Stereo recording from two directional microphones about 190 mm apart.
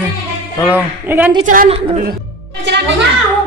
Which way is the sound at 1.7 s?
30° right (ahead or behind).